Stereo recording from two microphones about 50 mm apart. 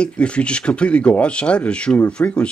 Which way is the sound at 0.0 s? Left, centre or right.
Left.